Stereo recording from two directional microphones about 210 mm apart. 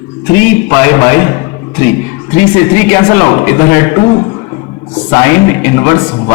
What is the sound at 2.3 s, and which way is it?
A man's voice, 10° left (ahead or behind).